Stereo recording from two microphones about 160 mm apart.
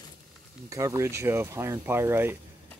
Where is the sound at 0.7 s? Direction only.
20° right (ahead or behind).